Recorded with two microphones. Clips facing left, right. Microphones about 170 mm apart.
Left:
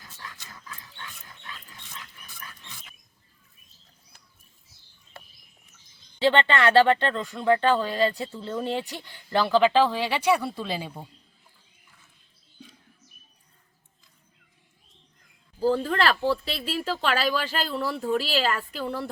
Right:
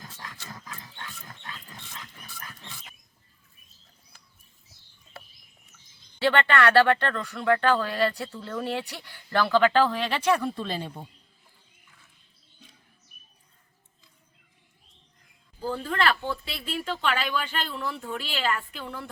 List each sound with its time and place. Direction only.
0.6 s dog: 40° right (ahead or behind)
6.1 s speech: 20° left (ahead or behind)
15.6 s speech: 35° left (ahead or behind)